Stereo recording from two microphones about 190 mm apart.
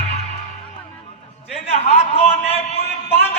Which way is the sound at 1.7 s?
35° left (ahead or behind).